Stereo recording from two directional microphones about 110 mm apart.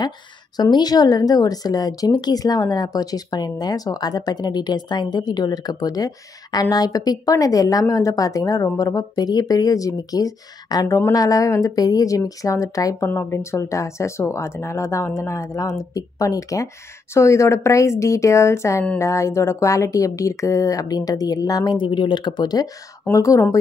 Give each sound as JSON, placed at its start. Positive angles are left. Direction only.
{"t": 0.6, "sound": "a woman's voice", "side_deg": 40}